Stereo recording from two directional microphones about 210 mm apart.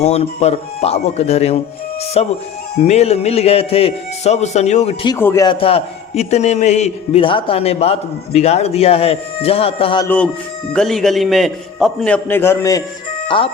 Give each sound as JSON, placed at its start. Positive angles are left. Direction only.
{"t": 0.0, "sound": "a man's voice", "side_deg": 30}
{"t": 5.0, "sound": "a man's voice", "side_deg": 10}
{"t": 10.8, "sound": "a man's voice", "side_deg": 0}
{"t": 13.2, "sound": "speech", "side_deg": 25}